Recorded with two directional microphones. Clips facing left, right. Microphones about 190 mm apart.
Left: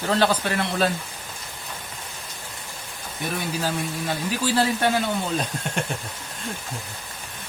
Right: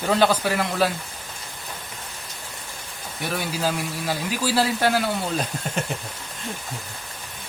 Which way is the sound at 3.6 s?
10° right (ahead or behind).